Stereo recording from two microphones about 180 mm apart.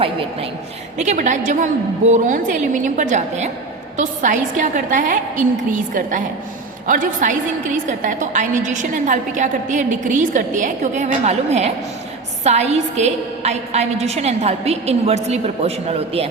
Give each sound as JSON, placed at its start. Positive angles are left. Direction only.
{"t": 0.9, "sound": "a woman's voice", "side_deg": -40}